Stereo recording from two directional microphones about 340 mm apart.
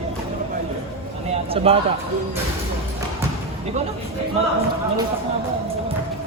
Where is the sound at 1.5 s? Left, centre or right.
Centre.